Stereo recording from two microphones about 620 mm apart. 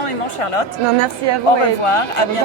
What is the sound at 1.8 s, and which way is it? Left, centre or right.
Speech, left.